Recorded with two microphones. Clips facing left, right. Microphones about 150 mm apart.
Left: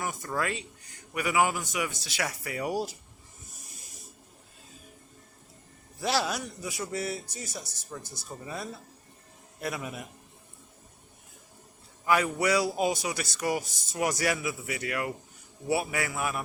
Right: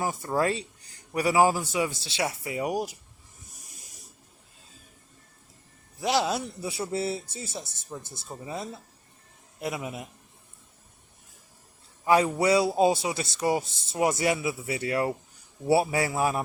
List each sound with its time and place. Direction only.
0.0 s a man's voice: 30° right (ahead or behind)
6.0 s a man's voice: 20° right (ahead or behind)
12.0 s a man's voice: 30° right (ahead or behind)